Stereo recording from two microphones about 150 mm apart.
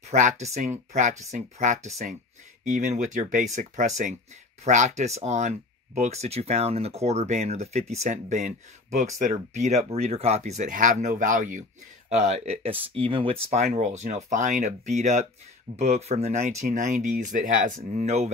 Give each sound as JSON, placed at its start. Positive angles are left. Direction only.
{"t": 0.1, "sound": "speech", "side_deg": -55}
{"t": 12.1, "sound": "speech", "side_deg": -50}